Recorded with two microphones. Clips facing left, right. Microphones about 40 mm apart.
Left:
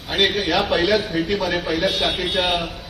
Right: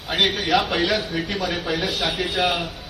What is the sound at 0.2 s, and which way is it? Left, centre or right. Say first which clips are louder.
A man's voice: left 1 dB; left.